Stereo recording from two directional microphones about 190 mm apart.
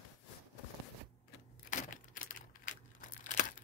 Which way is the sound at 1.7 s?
45° left (ahead or behind).